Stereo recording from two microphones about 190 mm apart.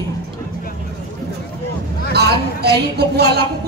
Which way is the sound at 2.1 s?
60° right (ahead or behind).